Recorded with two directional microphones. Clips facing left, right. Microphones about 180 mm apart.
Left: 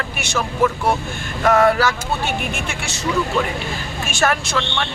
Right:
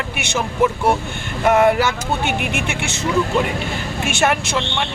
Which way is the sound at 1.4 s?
15° right (ahead or behind).